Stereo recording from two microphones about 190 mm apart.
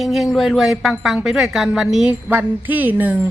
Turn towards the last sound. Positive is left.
turn(degrees=-10)  # may be behind; listen again after turning